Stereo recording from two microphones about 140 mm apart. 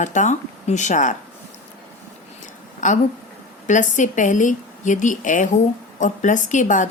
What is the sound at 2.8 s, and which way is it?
A woman's voice, 60° left (ahead or behind).